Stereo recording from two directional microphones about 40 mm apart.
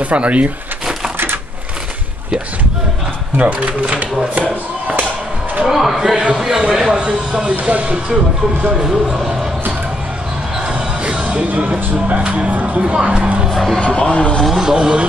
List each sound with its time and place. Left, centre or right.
0.0 s speech: right
3.3 s music: right
5.7 s speech: centre
6.6 s speech: right
7.6 s music: right
8.6 s speech: centre
11.1 s music: right
12.8 s speech: right
13.5 s speech: centre
13.7 s speech: left
14.6 s speech: centre